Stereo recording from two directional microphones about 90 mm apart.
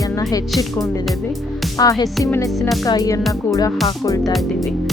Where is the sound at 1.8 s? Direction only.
45° left (ahead or behind).